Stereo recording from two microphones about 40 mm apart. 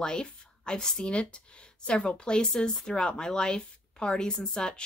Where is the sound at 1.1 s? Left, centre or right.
Left.